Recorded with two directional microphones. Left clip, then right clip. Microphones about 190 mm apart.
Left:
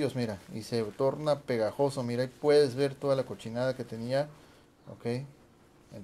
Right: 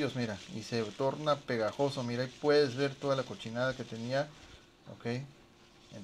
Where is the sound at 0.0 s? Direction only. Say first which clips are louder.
Left 3 dB; 15° left (ahead or behind).